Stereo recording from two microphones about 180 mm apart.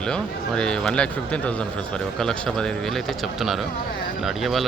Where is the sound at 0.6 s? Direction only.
5° left (ahead or behind).